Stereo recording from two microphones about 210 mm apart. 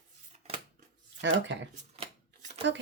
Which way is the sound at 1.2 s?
55° right (ahead or behind).